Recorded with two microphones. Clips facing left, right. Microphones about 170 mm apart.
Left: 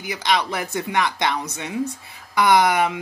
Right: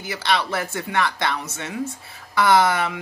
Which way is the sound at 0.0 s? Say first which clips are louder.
Left 1 dB; 15° left (ahead or behind).